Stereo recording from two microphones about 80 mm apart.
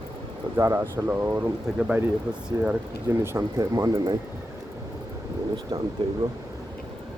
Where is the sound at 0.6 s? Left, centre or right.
Right.